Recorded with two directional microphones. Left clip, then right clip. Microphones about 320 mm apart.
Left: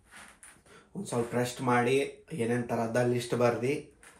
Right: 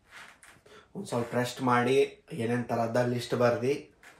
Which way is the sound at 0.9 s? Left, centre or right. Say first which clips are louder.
Even; centre.